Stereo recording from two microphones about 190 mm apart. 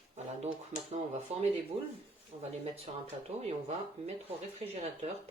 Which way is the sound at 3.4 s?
35° right (ahead or behind).